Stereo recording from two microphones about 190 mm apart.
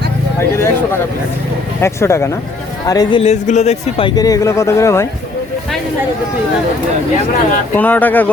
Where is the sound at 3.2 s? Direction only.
35° left (ahead or behind); by 5.0 s 15° left (ahead or behind).